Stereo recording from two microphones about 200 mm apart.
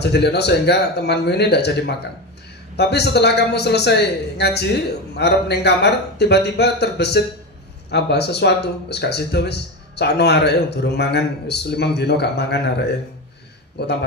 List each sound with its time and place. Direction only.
0.0 s speech: 55° left (ahead or behind)
13.8 s speech: 55° left (ahead or behind)